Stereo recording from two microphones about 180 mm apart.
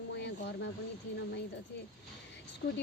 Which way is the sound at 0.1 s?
70° left (ahead or behind).